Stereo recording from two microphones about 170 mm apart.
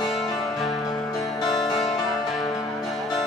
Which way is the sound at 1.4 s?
Centre (ahead or behind).